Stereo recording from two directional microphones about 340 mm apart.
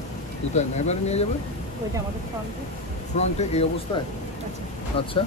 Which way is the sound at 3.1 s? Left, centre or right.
Centre.